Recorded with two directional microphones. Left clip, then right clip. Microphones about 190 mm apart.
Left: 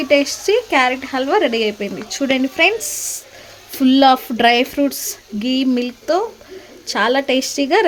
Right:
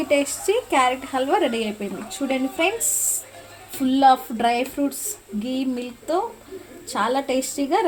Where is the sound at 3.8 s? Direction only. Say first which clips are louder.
Left 4 dB; 45° left (ahead or behind).